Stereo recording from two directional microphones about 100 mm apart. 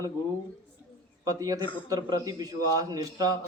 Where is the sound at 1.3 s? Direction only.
35° right (ahead or behind).